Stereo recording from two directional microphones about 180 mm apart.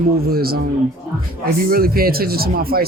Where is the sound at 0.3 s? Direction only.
55° right (ahead or behind).